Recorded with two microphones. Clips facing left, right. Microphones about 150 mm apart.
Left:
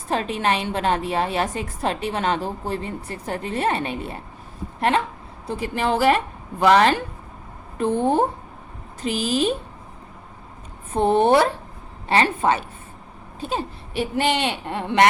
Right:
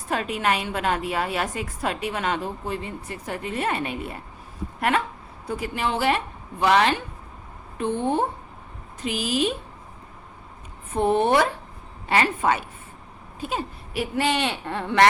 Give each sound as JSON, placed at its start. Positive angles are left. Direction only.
{"t": 0.1, "sound": "a woman's voice", "side_deg": 30}
{"t": 9.3, "sound": "speech", "side_deg": 35}
{"t": 10.9, "sound": "a woman's voice", "side_deg": 30}